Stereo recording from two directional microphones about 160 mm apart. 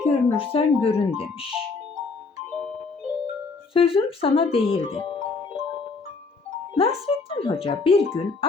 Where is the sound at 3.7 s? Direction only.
35° left (ahead or behind).